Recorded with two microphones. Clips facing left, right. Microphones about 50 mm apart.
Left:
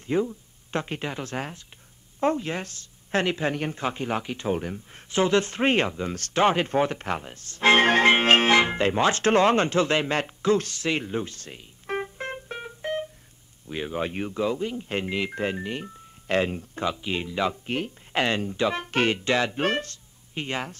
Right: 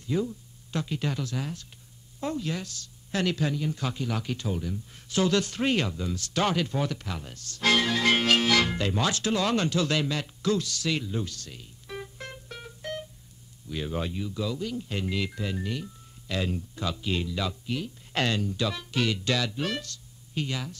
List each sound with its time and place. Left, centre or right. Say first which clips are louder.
0.0 s a woman's voice: left 4 dB; left
4.2 s speech: even; left
4.5 s speech: left 5 dB; left
5.1 s speech: left 3 dB; left
11.9 s music: left 9 dB; left
13.7 s speech: left 2 dB; left
14.3 s speech: left 6 dB; left
15.3 s speech: left 4 dB; left
16.9 s speech: left 1 dB; left
18.1 s speech: left 3 dB; left